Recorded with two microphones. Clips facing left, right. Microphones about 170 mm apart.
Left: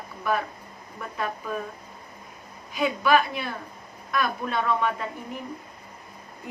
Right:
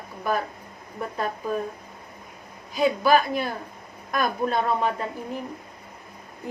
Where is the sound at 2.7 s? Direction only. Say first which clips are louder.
Right 2 dB; 35° right (ahead or behind).